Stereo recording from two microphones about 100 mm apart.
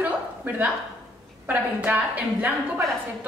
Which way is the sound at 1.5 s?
15° right (ahead or behind).